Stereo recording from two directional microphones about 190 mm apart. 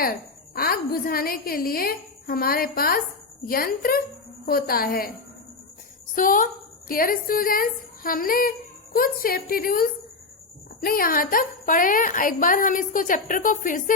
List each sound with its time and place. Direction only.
0.0 s a woman's voice: 50° left (ahead or behind)
6.1 s a woman's voice: 45° left (ahead or behind)